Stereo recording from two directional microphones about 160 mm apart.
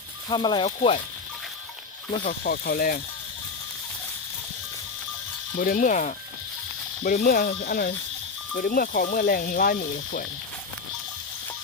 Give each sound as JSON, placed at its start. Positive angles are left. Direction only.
{"t": 0.3, "sound": "speech", "side_deg": 30}
{"t": 2.2, "sound": "speech", "side_deg": 65}
{"t": 5.5, "sound": "speech", "side_deg": 60}